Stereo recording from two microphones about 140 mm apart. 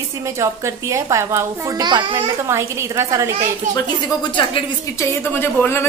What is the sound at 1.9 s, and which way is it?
Speech, 35° right (ahead or behind).